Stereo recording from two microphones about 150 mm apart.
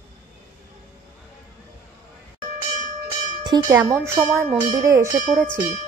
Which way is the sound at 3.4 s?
25° right (ahead or behind).